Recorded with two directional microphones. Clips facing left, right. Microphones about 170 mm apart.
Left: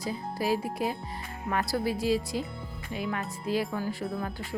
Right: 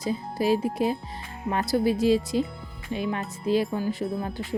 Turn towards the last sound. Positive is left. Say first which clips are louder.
# right 4 dB
turn(degrees=-20)  # may be behind; listen again after turning